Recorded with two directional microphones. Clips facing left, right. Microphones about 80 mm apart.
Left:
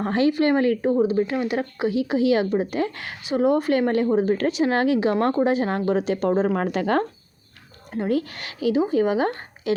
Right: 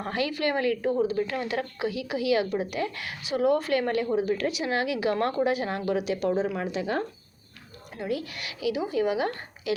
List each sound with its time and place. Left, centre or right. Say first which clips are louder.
0.0 s a woman's voice: left 8 dB; left
4.9 s a woman's voice: left 5 dB; left
7.9 s a woman's voice: left 7 dB; left